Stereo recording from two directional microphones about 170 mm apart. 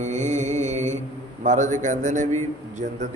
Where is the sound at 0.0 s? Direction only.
45° right (ahead or behind).